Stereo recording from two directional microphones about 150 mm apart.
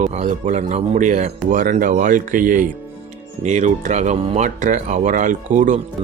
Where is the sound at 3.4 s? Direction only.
55° right (ahead or behind).